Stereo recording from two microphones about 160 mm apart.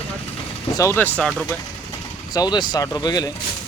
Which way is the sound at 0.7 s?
15° left (ahead or behind).